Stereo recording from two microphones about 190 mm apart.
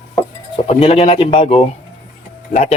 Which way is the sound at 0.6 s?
30° left (ahead or behind).